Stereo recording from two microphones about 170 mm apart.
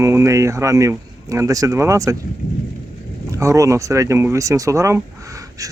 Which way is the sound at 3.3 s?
20° right (ahead or behind).